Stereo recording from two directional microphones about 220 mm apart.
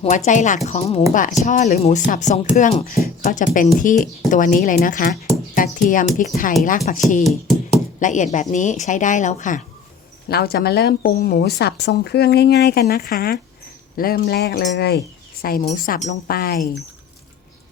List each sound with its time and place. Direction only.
0.3 s a woman's voice: 35° left (ahead or behind)
10.2 s speech: 45° left (ahead or behind)
13.9 s cutlery: 40° left (ahead or behind)
15.6 s speech: 35° left (ahead or behind)